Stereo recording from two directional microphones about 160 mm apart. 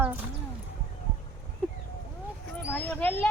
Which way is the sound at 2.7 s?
10° left (ahead or behind).